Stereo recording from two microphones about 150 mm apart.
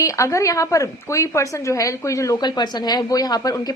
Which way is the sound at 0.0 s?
20° left (ahead or behind).